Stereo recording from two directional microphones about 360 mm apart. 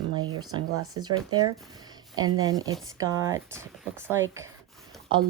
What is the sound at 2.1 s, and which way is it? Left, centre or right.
Speech, centre.